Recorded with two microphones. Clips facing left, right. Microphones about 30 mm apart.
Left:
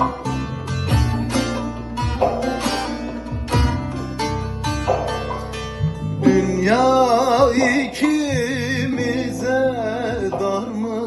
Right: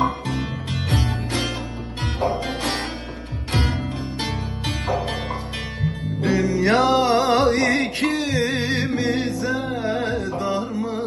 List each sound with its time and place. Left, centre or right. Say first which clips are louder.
0.0 s music: left 1 dB; right
6.2 s music: left 4 dB; right